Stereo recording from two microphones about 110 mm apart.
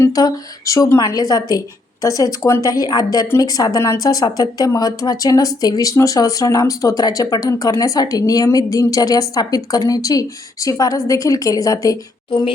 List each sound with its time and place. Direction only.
0.1 s speech: 35° left (ahead or behind)